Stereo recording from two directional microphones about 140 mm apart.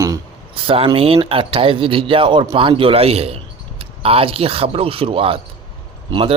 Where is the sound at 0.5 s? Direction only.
40° right (ahead or behind).